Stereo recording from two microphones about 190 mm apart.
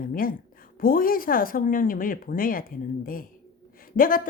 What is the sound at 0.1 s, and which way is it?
A woman's voice, 50° left (ahead or behind).